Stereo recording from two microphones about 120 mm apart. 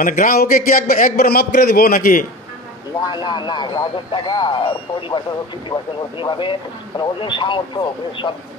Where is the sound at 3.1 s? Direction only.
40° left (ahead or behind).